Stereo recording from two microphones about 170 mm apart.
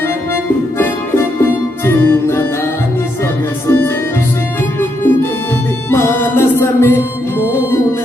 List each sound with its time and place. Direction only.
1.8 s music: 15° left (ahead or behind)
3.7 s music: 15° left (ahead or behind)